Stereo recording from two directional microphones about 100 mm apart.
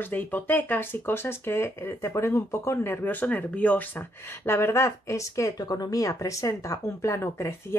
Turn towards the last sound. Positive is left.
turn(degrees=25)  # may be behind; listen again after turning